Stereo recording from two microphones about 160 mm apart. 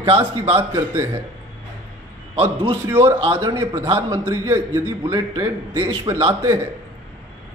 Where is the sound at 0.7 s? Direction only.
15° right (ahead or behind).